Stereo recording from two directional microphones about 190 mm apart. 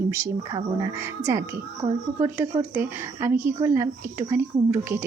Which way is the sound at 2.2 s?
10° right (ahead or behind).